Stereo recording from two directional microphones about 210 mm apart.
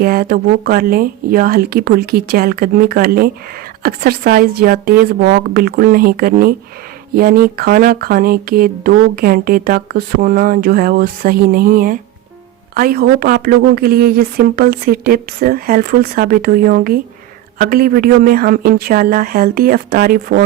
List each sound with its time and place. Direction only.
0.0 s speech: 45° right (ahead or behind)